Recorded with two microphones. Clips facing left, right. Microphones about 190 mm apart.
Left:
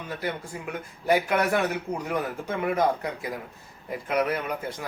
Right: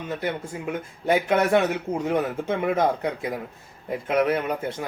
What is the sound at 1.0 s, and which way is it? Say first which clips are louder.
Speech: right 2 dB; 25° right (ahead or behind).